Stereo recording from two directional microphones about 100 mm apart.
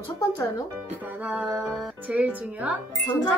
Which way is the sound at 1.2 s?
15° right (ahead or behind).